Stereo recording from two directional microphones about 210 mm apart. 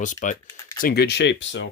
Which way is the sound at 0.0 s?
40° left (ahead or behind).